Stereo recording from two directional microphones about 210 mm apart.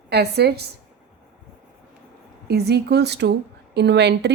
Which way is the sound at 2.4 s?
50° right (ahead or behind).